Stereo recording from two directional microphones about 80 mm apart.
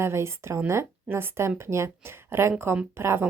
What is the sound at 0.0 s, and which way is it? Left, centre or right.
A woman's voice, right.